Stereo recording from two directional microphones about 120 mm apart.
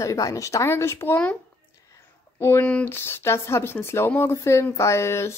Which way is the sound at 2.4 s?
20° left (ahead or behind).